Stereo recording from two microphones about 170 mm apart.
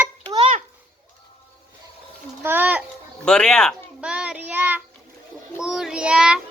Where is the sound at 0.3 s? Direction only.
35° right (ahead or behind).